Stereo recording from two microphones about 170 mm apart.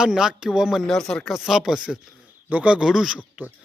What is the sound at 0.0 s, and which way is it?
Speech, 5° right (ahead or behind).